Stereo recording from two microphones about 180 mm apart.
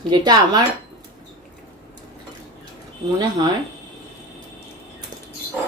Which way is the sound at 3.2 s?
20° right (ahead or behind).